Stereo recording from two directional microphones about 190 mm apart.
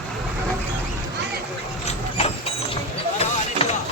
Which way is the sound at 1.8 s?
30° left (ahead or behind).